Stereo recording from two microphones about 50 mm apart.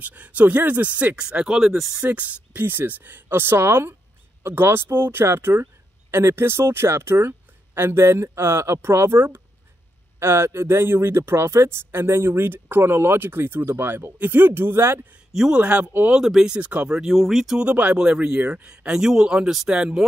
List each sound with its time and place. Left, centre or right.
0.0 s speech: right
1.1 s speech: centre
1.6 s speech: centre
2.0 s speech: right
15.5 s speech: right
16.4 s speech: right
17.1 s speech: centre
17.6 s speech: right
17.9 s speech: centre